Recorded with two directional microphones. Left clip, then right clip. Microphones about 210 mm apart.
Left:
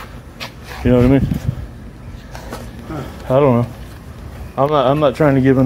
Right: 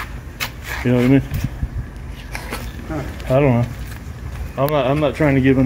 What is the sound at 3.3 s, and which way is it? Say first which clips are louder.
Speech: left 3 dB; 20° left (ahead or behind).